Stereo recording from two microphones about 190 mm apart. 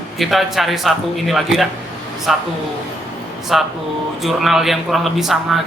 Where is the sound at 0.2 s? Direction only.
Centre (ahead or behind).